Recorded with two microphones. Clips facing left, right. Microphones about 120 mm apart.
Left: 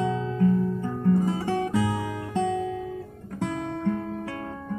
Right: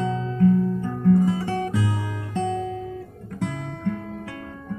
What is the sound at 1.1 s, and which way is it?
Music, 30° left (ahead or behind).